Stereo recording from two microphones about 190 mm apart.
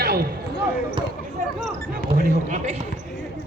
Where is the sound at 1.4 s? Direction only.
45° right (ahead or behind).